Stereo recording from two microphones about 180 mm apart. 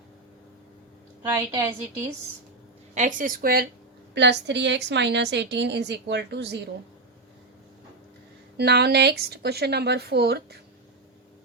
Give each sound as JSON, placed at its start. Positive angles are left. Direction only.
{"t": 1.5, "sound": "a woman's voice", "side_deg": -20}
{"t": 2.9, "sound": "a woman's voice", "side_deg": -45}
{"t": 4.1, "sound": "a woman's voice", "side_deg": -75}
{"t": 8.5, "sound": "speech", "side_deg": -65}